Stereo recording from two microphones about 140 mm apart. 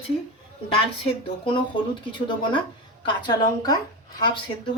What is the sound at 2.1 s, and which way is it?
A woman's voice, 35° left (ahead or behind).